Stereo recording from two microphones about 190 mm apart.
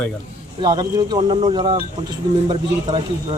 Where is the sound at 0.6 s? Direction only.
20° right (ahead or behind).